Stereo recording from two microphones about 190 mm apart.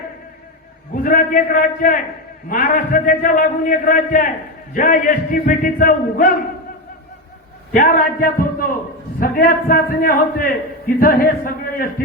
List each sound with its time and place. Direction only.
1.0 s a man's voice: 45° left (ahead or behind)
7.7 s a man's voice: 45° left (ahead or behind)